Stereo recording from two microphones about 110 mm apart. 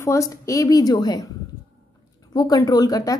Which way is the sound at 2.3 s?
35° left (ahead or behind).